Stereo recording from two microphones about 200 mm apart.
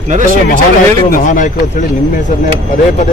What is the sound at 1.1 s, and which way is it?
Speech, 40° left (ahead or behind).